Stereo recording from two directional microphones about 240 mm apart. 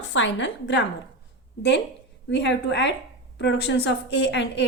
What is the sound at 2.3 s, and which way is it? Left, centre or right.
A woman's voice, left.